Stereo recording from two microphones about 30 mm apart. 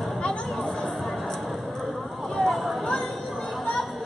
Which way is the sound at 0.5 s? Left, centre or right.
Centre.